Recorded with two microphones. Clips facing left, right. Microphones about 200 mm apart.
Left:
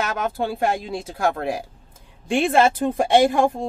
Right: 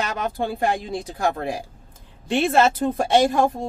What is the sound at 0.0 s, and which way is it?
A woman's voice, 10° left (ahead or behind).